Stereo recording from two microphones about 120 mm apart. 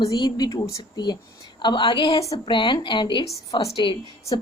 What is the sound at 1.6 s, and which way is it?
A woman's voice, 40° left (ahead or behind).